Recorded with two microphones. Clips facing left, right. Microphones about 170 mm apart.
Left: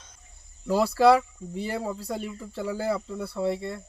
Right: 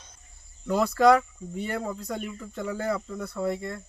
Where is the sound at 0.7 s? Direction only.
30° left (ahead or behind).